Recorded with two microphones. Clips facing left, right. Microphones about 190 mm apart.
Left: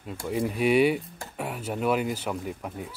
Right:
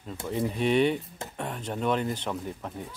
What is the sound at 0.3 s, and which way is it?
Speech, 10° left (ahead or behind).